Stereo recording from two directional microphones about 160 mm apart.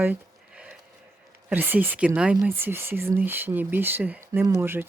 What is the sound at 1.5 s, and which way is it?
Speech, 10° right (ahead or behind).